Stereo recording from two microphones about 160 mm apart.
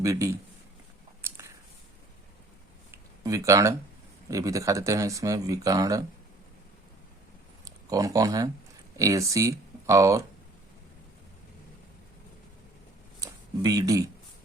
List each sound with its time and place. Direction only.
0.0 s speech: 20° right (ahead or behind)
3.2 s speech: 20° right (ahead or behind)
7.6 s speech: 20° right (ahead or behind)
13.1 s a sound: 25° right (ahead or behind)